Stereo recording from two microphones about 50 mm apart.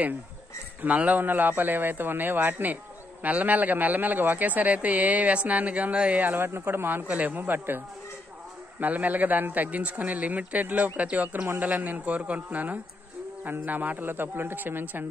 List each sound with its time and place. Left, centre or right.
0.8 s speech: right
6.2 s speech: right